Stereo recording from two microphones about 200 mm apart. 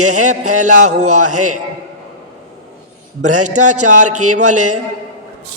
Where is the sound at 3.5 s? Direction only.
35° right (ahead or behind).